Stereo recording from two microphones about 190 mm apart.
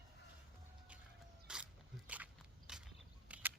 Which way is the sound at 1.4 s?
5° right (ahead or behind).